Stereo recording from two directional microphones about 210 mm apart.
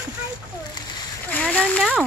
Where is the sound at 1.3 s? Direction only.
5° left (ahead or behind).